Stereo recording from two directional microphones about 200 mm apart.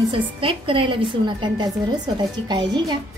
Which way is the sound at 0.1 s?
25° right (ahead or behind).